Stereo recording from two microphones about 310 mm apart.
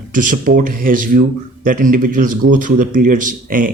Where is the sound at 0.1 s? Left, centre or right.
Right.